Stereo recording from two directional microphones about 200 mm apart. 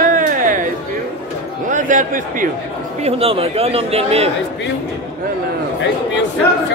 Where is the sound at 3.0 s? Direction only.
30° right (ahead or behind).